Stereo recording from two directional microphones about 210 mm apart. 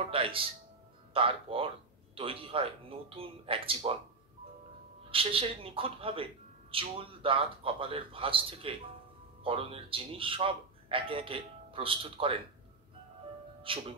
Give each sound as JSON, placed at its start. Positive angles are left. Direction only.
{"t": 0.0, "sound": "speech", "side_deg": -25}
{"t": 5.1, "sound": "speech", "side_deg": -25}
{"t": 13.7, "sound": "speech", "side_deg": -25}